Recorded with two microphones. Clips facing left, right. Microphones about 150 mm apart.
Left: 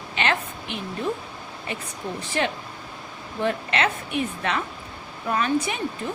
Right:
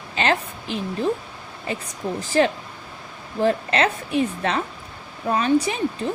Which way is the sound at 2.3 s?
35° right (ahead or behind).